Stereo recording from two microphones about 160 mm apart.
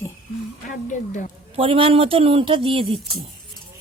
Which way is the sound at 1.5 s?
35° right (ahead or behind).